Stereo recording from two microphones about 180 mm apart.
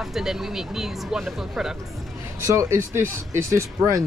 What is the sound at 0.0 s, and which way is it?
Speech, centre (ahead or behind).